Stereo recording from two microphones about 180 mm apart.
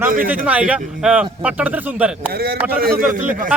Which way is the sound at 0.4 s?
5° right (ahead or behind).